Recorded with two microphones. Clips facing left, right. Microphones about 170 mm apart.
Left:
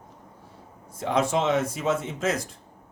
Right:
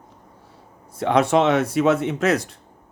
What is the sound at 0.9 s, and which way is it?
Speech, 70° right (ahead or behind).